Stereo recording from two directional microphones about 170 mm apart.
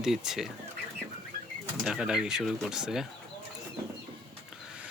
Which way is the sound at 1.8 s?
5° right (ahead or behind).